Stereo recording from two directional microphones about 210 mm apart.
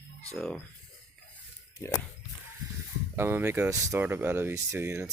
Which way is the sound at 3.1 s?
10° right (ahead or behind).